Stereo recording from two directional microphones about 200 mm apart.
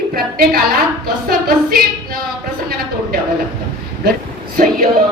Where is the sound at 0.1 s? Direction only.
45° right (ahead or behind).